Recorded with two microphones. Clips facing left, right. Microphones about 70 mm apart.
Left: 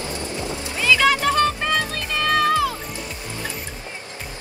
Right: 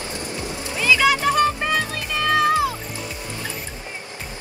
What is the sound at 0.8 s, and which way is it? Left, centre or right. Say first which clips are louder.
Music: even; centre.